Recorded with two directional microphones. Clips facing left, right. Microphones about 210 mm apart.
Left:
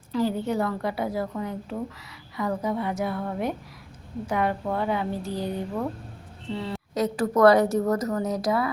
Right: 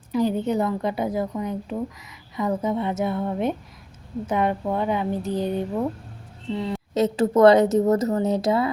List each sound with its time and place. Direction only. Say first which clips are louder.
0.1 s a woman's voice: right 3 dB; 20° right (ahead or behind)
6.9 s a woman's voice: right 4 dB; 25° right (ahead or behind)